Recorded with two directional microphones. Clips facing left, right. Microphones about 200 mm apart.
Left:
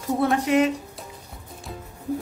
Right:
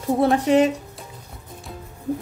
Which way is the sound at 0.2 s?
30° right (ahead or behind).